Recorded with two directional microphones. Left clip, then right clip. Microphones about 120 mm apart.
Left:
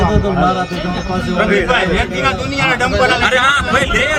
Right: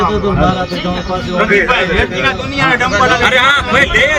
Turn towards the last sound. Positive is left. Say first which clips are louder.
# right 3 dB
turn(degrees=30)  # may be behind; listen again after turning